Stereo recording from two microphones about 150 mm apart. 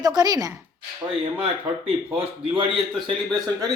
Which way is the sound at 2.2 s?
35° right (ahead or behind).